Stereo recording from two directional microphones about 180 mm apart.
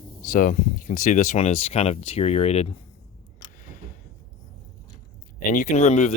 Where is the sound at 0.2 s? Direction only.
50° left (ahead or behind).